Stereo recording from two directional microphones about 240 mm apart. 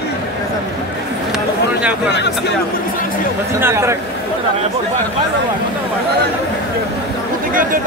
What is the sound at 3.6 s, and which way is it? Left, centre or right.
Speech, centre.